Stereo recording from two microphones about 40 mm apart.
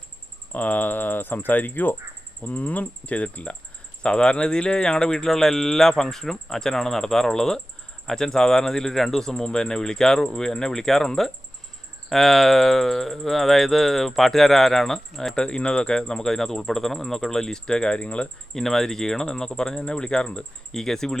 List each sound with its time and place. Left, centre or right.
0.5 s speech: left
2.4 s speech: left
4.0 s speech: left
15.4 s speech: centre
18.5 s speech: centre